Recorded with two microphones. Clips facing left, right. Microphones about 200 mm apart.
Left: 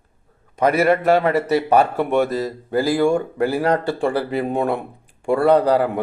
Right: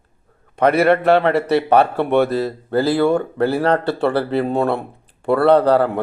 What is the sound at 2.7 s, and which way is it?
Speech, 10° left (ahead or behind).